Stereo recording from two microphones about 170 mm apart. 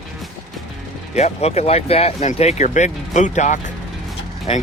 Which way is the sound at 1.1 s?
40° left (ahead or behind).